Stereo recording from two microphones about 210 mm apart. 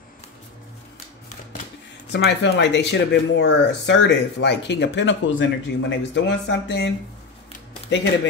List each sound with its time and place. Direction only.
2.1 s speech: 55° left (ahead or behind)